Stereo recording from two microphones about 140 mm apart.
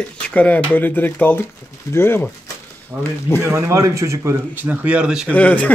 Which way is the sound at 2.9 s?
20° right (ahead or behind).